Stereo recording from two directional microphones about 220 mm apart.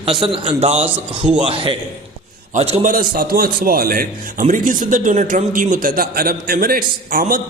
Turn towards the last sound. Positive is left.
turn(degrees=-40)  # may be behind; listen again after turning